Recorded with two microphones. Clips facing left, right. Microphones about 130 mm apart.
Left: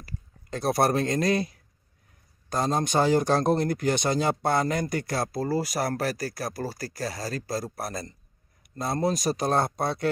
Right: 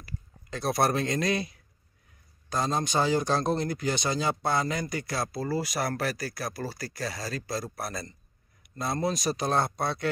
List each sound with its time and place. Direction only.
0.0 s speech: 40° left (ahead or behind)